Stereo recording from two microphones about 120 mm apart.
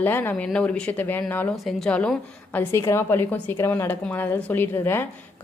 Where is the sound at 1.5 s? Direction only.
5° left (ahead or behind).